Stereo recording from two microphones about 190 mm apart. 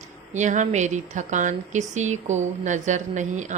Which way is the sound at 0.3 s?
40° right (ahead or behind).